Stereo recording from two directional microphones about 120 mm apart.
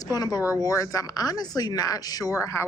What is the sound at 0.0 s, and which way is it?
Speech, 30° left (ahead or behind).